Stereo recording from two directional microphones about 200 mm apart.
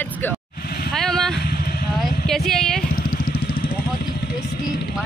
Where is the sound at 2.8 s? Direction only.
45° left (ahead or behind).